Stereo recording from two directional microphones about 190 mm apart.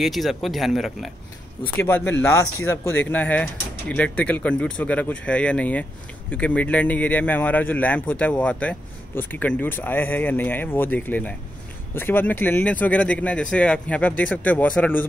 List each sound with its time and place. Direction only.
0.0 s speech: centre (ahead or behind)
1.8 s a man's voice: 10° left (ahead or behind)